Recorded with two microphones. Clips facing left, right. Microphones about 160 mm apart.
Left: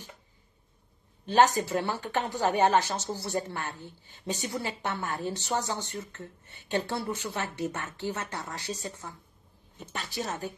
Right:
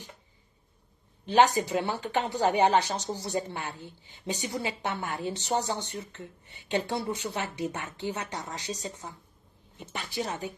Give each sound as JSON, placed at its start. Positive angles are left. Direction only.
{"t": 1.2, "sound": "speech", "side_deg": -15}